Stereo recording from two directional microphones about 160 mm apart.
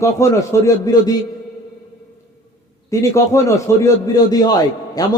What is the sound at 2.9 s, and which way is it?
A man's voice, 20° left (ahead or behind).